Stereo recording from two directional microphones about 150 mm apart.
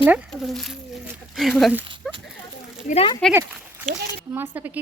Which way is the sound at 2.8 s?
45° left (ahead or behind).